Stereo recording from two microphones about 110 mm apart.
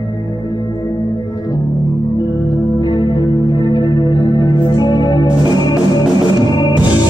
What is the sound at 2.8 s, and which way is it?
Music, 40° left (ahead or behind).